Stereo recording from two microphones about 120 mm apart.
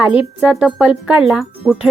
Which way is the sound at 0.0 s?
10° right (ahead or behind).